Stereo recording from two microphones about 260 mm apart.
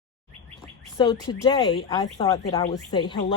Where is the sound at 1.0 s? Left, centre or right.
Centre.